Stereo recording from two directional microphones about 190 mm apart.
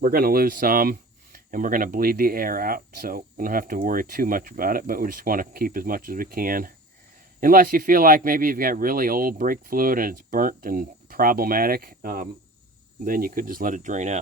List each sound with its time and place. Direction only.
0.0 s speech: 50° right (ahead or behind)